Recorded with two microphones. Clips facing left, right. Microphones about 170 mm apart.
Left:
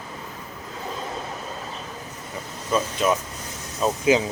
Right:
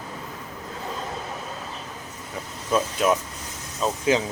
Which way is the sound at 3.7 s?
10° left (ahead or behind).